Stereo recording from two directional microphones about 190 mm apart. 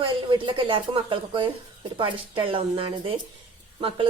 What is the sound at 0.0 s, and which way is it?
A woman's voice, 25° right (ahead or behind).